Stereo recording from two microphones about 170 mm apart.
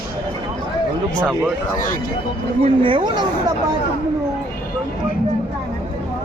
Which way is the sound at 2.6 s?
30° right (ahead or behind).